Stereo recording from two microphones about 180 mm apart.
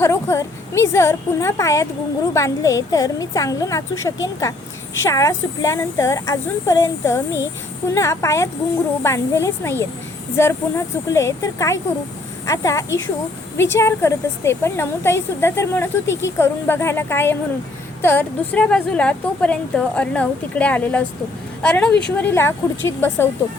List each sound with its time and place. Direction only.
0.0 s a woman's voice: 15° left (ahead or behind)